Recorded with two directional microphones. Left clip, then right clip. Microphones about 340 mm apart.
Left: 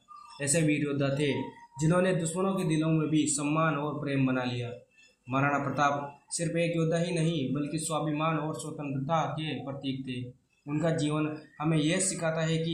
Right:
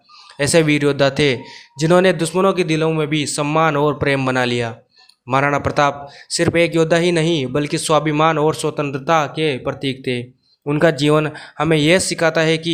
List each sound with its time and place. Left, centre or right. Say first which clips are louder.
0.3 s speech: right 14 dB; right